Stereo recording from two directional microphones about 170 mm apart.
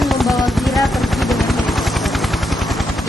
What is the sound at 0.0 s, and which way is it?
Gunshot, centre (ahead or behind).